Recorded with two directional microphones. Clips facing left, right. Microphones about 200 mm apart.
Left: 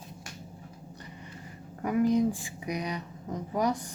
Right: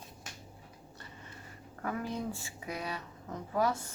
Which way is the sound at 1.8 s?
15° left (ahead or behind).